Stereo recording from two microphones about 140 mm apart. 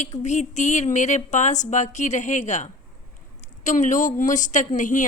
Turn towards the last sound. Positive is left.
turn(degrees=65)  # may be behind; listen again after turning